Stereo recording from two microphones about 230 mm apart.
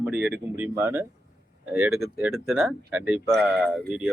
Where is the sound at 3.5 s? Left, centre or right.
Right.